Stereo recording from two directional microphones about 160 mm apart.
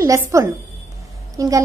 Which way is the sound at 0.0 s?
20° right (ahead or behind).